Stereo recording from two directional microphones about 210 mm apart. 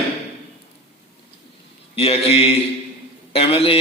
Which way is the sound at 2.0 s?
30° left (ahead or behind).